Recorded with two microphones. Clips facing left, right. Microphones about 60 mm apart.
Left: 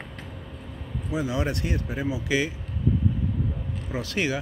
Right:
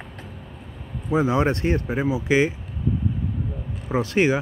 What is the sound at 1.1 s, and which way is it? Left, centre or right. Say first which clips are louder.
Speech: right 7 dB; right.